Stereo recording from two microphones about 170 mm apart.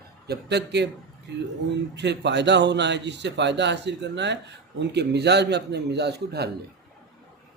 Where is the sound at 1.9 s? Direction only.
90° right; by 6.5 s 75° right (ahead or behind).